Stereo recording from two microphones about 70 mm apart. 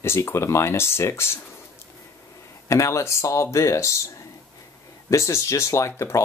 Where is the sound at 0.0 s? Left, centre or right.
Left.